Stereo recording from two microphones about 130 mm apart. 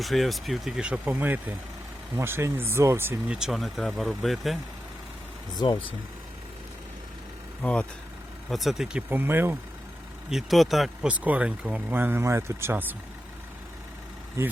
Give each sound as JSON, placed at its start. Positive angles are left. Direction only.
{"t": 0.0, "sound": "speech", "side_deg": 0}
{"t": 3.3, "sound": "speech", "side_deg": -5}
{"t": 5.5, "sound": "speech", "side_deg": 35}
{"t": 7.6, "sound": "speech", "side_deg": 5}
{"t": 10.2, "sound": "speech", "side_deg": 0}